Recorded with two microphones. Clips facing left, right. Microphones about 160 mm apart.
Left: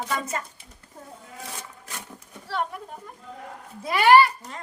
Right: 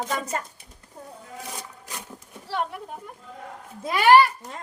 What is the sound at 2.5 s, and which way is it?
Speech, 15° right (ahead or behind).